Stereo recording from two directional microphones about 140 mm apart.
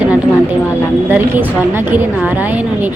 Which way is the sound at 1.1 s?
15° right (ahead or behind).